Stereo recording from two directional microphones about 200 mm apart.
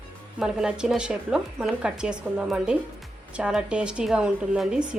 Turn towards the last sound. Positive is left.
turn(degrees=-5)  # may be behind; listen again after turning